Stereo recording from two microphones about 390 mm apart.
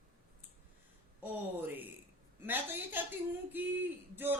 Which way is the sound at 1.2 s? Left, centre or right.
Centre.